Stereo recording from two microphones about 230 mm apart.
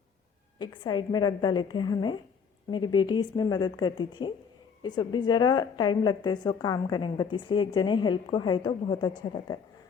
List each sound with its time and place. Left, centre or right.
0.6 s a woman's voice: centre